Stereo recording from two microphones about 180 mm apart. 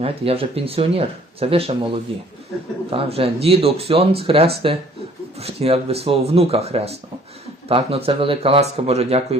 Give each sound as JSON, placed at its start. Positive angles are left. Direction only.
{"t": 0.0, "sound": "speech", "side_deg": -35}